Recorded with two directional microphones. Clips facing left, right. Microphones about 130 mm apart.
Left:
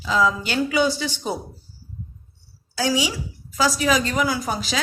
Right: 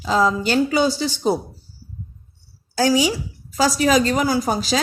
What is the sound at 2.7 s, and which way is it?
A woman's voice, 45° right (ahead or behind).